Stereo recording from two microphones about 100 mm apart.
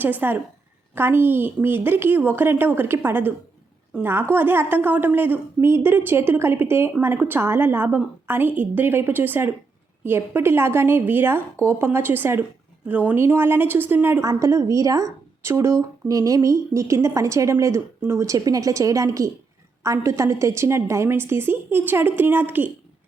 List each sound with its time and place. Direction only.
0.0 s a woman's voice: 20° right (ahead or behind)
14.2 s a woman's voice: 35° right (ahead or behind)